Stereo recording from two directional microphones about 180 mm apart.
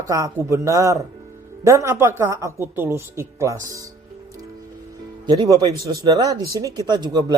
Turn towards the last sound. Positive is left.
turn(degrees=-20)  # may be behind; listen again after turning